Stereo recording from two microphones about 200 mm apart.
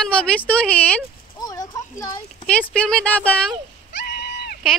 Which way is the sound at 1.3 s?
20° left (ahead or behind).